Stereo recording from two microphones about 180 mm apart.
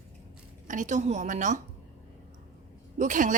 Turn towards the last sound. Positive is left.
turn(degrees=-45)  # may be behind; listen again after turning